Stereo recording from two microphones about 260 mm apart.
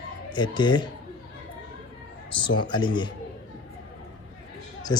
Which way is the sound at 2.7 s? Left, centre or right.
Centre.